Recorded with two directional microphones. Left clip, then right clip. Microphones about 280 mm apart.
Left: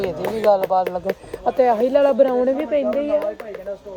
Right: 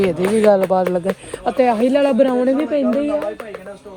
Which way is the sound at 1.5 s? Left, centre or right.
Right.